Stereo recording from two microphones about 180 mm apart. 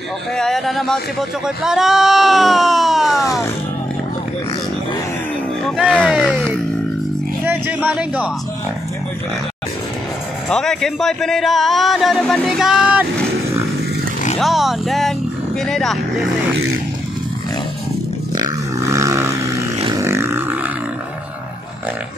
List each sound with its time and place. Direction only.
0.4 s a man's voice: centre (ahead or behind)
5.6 s speech: 5° left (ahead or behind)
7.4 s speech: 10° right (ahead or behind)
10.5 s a man's voice: 5° left (ahead or behind)
14.4 s a man's voice: centre (ahead or behind)
18.3 s a sound: 20° right (ahead or behind)
19.8 s roar: 20° right (ahead or behind)